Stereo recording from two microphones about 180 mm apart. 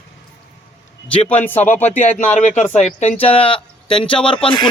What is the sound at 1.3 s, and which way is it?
Speech, 10° left (ahead or behind).